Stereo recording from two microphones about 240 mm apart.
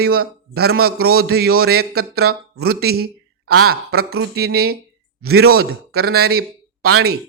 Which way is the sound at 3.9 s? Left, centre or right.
Right.